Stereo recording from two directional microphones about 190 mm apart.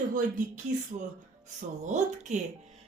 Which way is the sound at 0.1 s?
45° right (ahead or behind).